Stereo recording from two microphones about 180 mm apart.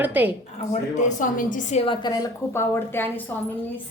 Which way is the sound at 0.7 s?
40° left (ahead or behind).